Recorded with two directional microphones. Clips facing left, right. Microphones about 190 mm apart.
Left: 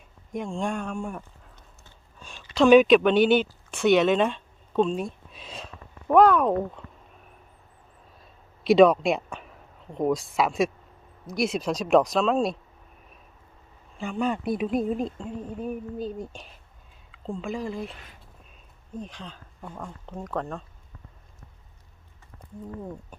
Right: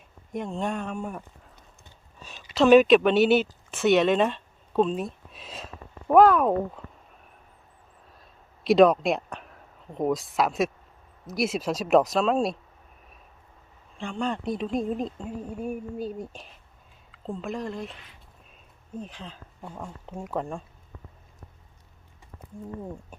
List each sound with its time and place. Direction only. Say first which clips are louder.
0.3 s speech: even; 5° right (ahead or behind)
2.2 s speech: left 1 dB; 5° right (ahead or behind)
8.2 s a sound: left 1 dB; centre (ahead or behind)
11.3 s speech: left 1 dB; 5° right (ahead or behind)
14.0 s speech: left 2 dB; 5° left (ahead or behind)
17.9 s speech: left 2 dB; 45° left (ahead or behind)
18.9 s speech: even; 5° right (ahead or behind)